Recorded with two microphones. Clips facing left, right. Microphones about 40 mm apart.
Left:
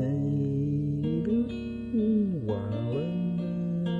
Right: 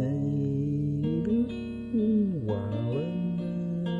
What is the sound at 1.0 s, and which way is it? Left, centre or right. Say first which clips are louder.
Music: right 1 dB; left.